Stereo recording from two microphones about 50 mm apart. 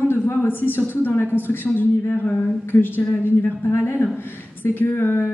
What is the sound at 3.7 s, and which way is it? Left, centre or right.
A woman's voice, left.